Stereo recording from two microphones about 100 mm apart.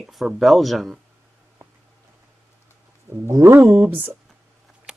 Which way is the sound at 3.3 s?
35° right (ahead or behind).